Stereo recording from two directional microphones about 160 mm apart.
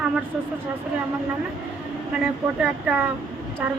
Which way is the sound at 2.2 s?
10° right (ahead or behind).